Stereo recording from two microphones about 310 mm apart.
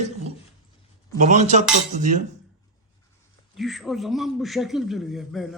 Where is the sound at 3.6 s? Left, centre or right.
Centre.